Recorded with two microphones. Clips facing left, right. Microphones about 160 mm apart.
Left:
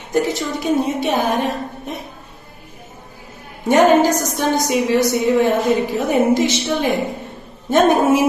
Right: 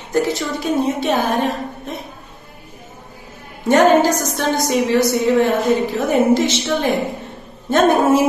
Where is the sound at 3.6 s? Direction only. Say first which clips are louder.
Even; 15° left (ahead or behind).